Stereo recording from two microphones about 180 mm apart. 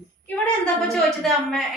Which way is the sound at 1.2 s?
Centre (ahead or behind).